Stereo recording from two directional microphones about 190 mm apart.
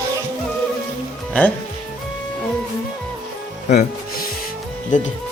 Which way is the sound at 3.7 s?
40° left (ahead or behind).